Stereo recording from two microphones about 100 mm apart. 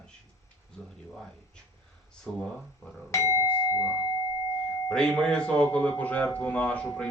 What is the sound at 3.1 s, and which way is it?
Doorbell, 30° left (ahead or behind).